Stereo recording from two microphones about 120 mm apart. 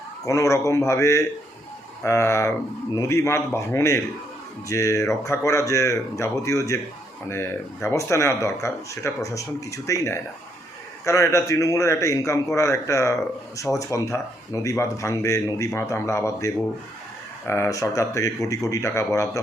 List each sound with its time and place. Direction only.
0.3 s speech: 25° left (ahead or behind)